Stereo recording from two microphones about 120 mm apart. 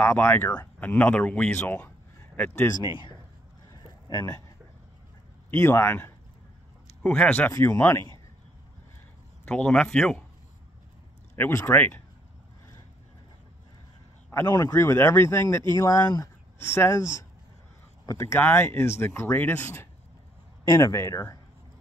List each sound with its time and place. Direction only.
0.0 s speech: 20° left (ahead or behind)
3.7 s a sound: 35° left (ahead or behind)
5.5 s speech: 20° left (ahead or behind)
7.0 s speech: 5° left (ahead or behind)
7.5 s speech: 20° left (ahead or behind)
9.4 s speech: 10° left (ahead or behind)
11.3 s speech: 20° left (ahead or behind)
14.5 s speech: 25° left (ahead or behind)
16.5 s speech: 20° left (ahead or behind)